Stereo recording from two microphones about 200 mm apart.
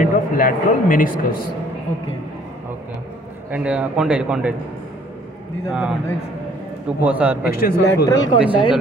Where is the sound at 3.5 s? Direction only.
5° right (ahead or behind).